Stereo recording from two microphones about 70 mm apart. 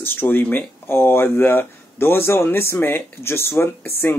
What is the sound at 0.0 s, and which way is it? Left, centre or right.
Speech, left.